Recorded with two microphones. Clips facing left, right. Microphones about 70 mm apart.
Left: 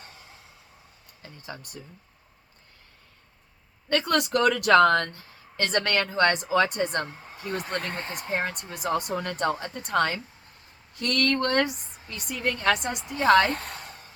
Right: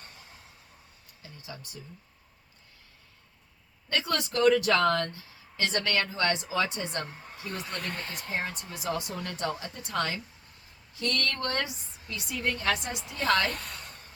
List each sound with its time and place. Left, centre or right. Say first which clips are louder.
1.2 s speech: left 4 dB; left
3.8 s speech: left 6 dB; left
8.4 s speech: left 5 dB; left
13.1 s speech: left 7 dB; left